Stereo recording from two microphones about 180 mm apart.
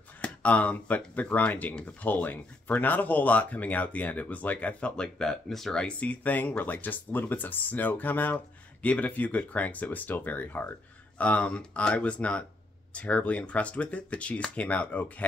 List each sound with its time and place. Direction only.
0.2 s speech: 10° left (ahead or behind)